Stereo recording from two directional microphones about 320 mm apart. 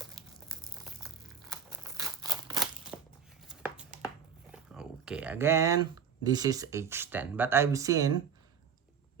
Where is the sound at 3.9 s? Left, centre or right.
Right.